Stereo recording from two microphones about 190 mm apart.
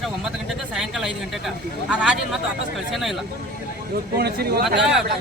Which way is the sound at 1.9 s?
5° right (ahead or behind).